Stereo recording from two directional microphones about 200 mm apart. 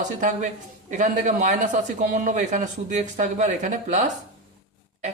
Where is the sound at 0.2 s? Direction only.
40° right (ahead or behind).